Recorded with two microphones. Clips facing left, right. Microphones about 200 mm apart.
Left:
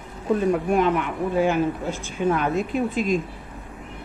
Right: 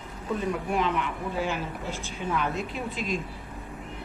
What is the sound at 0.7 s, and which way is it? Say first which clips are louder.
A woman's voice: left 6 dB; 50° left (ahead or behind).